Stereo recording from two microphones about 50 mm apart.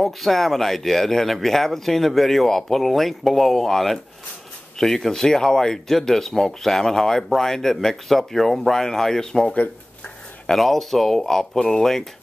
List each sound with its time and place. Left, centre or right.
0.0 s speech: centre